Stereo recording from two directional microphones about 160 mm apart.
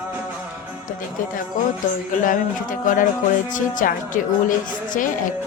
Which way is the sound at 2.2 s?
55° left (ahead or behind).